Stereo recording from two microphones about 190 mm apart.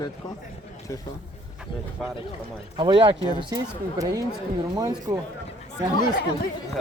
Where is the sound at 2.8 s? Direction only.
25° right (ahead or behind).